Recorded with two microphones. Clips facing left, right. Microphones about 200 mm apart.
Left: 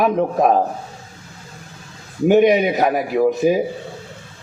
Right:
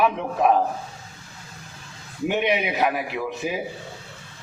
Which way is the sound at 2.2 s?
40° left (ahead or behind).